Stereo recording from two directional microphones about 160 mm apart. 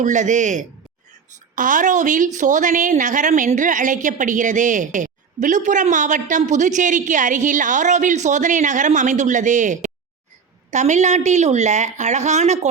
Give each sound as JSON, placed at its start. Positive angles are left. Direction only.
{"t": 0.0, "sound": "a woman's voice", "side_deg": -50}